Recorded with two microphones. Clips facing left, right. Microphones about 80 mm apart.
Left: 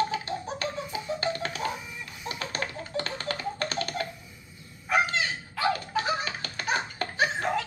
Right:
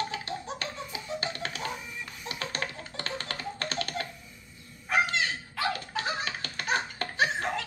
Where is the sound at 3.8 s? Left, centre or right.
Left.